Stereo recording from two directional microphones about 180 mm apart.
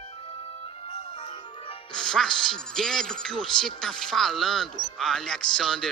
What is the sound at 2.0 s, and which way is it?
Speech, 5° left (ahead or behind).